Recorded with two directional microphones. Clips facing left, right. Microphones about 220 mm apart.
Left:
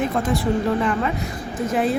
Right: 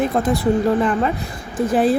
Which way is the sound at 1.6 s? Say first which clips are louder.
Right 5 dB; 35° right (ahead or behind).